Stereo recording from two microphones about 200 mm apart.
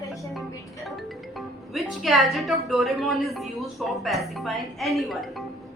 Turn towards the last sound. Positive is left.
turn(degrees=0)  # may be behind; listen again after turning